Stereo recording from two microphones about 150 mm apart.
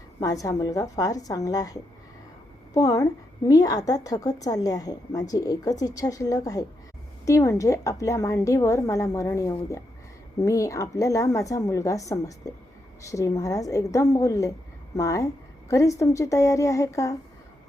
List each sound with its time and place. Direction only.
0.2 s a woman's voice: 25° left (ahead or behind)